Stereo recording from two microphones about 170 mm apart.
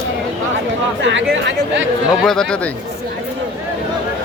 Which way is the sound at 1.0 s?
90° right.